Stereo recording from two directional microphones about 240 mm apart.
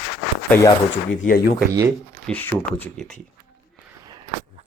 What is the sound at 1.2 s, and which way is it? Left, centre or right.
Speech, left.